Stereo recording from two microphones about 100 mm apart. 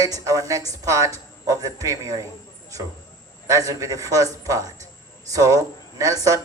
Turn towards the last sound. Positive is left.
turn(degrees=-35)  # may be behind; listen again after turning